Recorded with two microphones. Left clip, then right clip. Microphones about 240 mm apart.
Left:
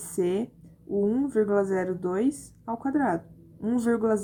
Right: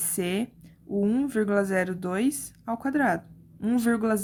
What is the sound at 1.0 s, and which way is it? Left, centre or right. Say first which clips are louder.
Speech: left 1 dB; right.